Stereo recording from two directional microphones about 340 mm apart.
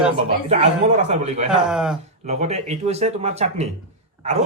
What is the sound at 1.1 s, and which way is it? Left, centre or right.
Speech, centre.